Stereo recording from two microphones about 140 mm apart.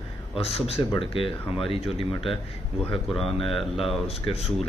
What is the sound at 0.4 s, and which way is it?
Speech, 45° left (ahead or behind).